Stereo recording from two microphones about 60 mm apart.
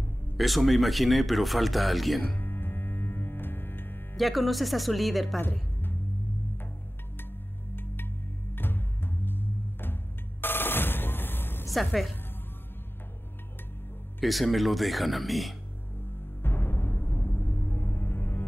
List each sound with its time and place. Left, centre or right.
0.4 s speech: centre
2.2 s music: left
4.2 s speech: centre
5.4 s music: left
7.7 s music: left
10.4 s telephone bell ringing: left
11.7 s speech: centre
14.2 s speech: centre
16.4 s music: left